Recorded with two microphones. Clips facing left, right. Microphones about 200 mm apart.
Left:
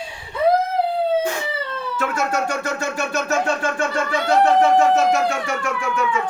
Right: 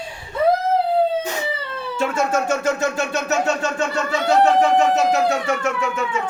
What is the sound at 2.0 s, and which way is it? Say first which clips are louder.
Vehicle: right 3 dB; 25° right (ahead or behind).